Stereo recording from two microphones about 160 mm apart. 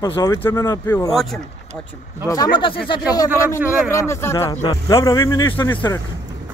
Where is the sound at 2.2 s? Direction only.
25° left (ahead or behind).